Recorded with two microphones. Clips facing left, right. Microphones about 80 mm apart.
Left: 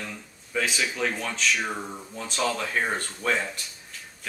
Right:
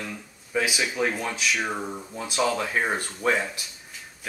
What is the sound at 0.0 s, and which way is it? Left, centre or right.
Speech, centre.